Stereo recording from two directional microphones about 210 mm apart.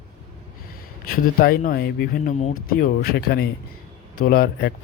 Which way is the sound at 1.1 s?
45° left (ahead or behind).